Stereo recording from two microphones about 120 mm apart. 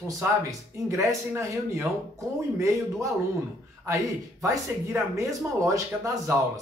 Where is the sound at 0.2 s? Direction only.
25° right (ahead or behind).